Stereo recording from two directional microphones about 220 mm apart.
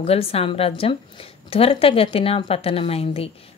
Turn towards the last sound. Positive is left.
turn(degrees=25)  # may be behind; listen again after turning